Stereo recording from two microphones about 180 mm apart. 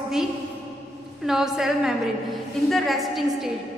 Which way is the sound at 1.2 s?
Centre (ahead or behind).